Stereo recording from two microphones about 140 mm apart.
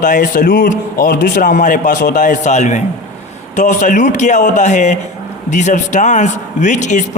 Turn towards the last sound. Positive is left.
turn(degrees=60)  # may be behind; listen again after turning